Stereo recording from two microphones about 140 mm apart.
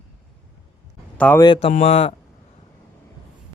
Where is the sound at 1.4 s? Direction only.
40° left (ahead or behind).